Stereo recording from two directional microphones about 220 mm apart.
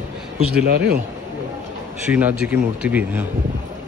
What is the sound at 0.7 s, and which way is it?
Speech, 45° right (ahead or behind).